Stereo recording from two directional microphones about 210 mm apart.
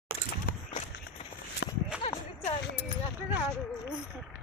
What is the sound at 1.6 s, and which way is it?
Horse, 60° left (ahead or behind).